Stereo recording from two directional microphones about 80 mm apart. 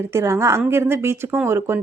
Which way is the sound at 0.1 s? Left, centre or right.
Right.